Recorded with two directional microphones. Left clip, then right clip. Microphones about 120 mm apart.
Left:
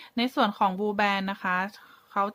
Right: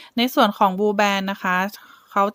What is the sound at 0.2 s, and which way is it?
Speech, 60° right (ahead or behind).